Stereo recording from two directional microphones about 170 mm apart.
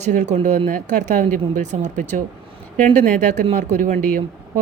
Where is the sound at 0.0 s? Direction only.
45° right (ahead or behind).